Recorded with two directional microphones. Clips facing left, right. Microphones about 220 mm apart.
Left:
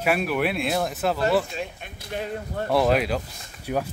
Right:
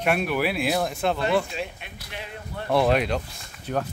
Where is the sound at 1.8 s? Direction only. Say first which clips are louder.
Left 7 dB; 45° left (ahead or behind).